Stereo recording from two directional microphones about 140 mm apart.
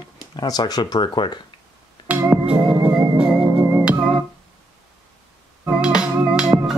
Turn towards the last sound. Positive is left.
turn(degrees=-5)  # may be behind; listen again after turning